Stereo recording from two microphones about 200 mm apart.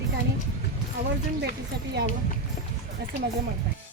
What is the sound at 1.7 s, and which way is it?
Speech, 50° right (ahead or behind).